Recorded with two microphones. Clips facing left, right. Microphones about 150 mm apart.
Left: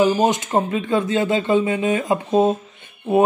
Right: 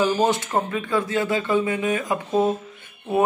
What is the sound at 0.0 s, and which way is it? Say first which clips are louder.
Speech: left 3 dB; 20° left (ahead or behind).